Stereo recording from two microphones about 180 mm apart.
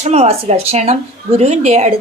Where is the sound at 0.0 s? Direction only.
35° right (ahead or behind).